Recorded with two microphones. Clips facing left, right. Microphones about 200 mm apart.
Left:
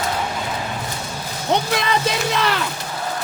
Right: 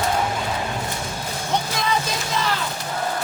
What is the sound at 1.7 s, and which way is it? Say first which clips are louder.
Music: left 4 dB; 70° left (ahead or behind).